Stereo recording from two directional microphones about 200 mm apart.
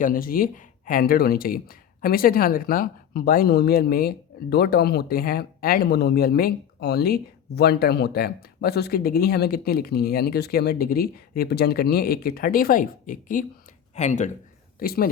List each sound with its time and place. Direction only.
0.0 s speech: 45° left (ahead or behind)
14.8 s speech: 45° left (ahead or behind)